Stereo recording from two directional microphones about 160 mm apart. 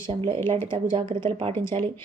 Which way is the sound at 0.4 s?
35° right (ahead or behind).